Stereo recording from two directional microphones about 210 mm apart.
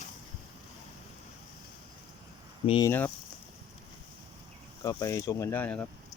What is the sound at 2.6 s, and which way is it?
Speech, 20° left (ahead or behind).